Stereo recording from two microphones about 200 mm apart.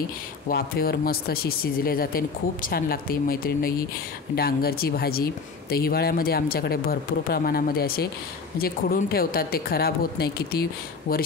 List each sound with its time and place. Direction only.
0.5 s speech: 50° left (ahead or behind)